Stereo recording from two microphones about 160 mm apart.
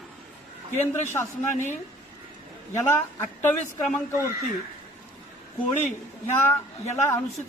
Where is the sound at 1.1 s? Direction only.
15° left (ahead or behind).